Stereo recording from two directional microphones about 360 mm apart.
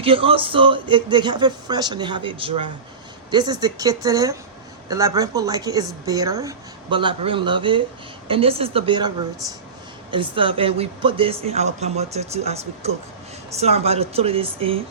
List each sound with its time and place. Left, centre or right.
0.0 s speech: centre